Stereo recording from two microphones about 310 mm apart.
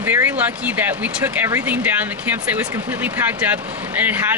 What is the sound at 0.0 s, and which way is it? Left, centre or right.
Speech, centre.